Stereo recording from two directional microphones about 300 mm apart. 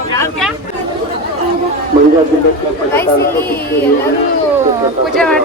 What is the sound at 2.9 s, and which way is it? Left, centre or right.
Speech, centre.